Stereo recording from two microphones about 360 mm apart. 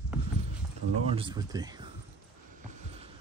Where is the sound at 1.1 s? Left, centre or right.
Centre.